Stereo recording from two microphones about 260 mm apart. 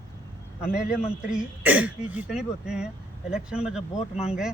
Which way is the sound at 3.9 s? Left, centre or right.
Left.